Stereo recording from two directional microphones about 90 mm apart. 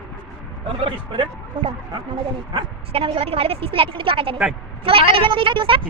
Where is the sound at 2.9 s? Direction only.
90° right.